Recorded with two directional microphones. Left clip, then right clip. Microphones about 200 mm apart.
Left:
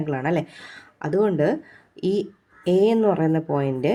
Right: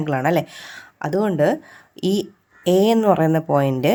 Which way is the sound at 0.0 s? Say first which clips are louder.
Right 5 dB; 25° right (ahead or behind).